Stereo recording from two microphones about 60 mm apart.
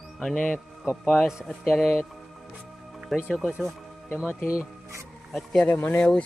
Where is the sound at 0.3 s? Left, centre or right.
Left.